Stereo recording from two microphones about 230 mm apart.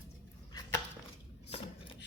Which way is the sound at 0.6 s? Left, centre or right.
Centre.